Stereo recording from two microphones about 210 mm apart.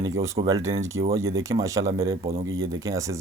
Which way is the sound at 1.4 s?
15° right (ahead or behind).